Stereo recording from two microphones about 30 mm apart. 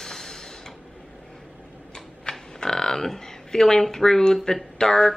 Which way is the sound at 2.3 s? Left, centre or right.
Left.